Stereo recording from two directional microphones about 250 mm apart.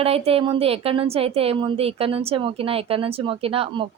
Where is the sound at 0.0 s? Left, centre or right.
Right.